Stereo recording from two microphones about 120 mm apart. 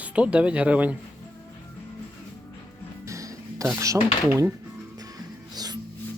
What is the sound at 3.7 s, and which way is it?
Speech, 25° right (ahead or behind).